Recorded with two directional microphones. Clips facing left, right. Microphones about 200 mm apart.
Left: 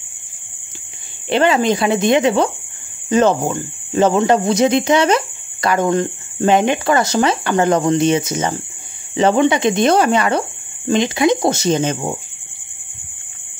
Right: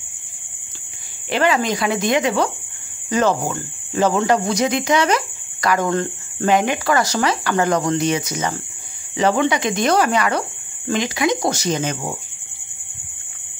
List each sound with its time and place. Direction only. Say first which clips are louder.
1.3 s speech: left 4 dB; 25° left (ahead or behind)